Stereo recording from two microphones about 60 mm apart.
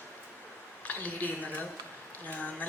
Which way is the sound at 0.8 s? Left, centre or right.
Left.